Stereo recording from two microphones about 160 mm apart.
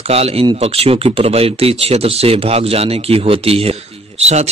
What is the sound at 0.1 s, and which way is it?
Speech, 40° right (ahead or behind).